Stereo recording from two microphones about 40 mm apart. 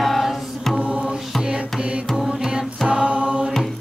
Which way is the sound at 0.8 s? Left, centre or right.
Right.